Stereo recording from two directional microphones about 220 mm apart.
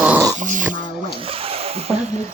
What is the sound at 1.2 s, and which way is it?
Speech, 25° right (ahead or behind).